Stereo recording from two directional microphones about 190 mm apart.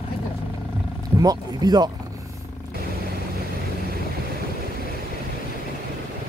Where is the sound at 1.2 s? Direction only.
20° right (ahead or behind).